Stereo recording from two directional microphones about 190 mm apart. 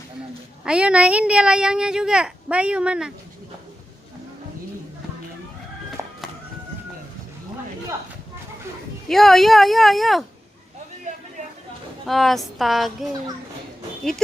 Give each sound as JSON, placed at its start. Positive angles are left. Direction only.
{"t": 0.6, "sound": "speech", "side_deg": -5}
{"t": 6.0, "sound": "music", "side_deg": -15}
{"t": 9.0, "sound": "speech", "side_deg": 0}
{"t": 12.0, "sound": "speech", "side_deg": 0}